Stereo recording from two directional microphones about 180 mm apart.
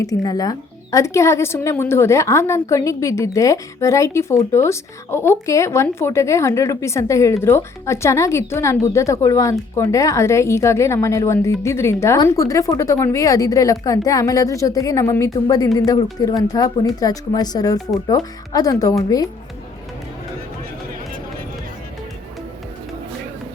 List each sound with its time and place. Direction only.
0.0 s speech: 20° left (ahead or behind)